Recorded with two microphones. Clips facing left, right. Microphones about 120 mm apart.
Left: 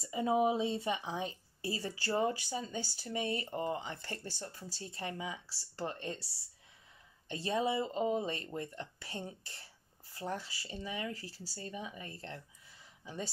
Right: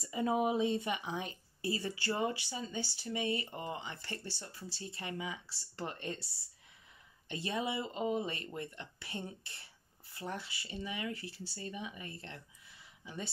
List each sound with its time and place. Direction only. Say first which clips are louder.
0.0 s speech: left 2 dB; 25° left (ahead or behind)
7.2 s speech: left 3 dB; 35° left (ahead or behind)